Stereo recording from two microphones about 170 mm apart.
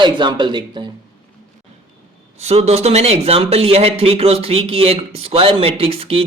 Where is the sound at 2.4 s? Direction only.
40° right (ahead or behind).